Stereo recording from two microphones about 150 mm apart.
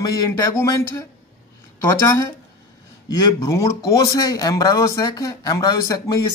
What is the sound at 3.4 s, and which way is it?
Speech, 20° left (ahead or behind).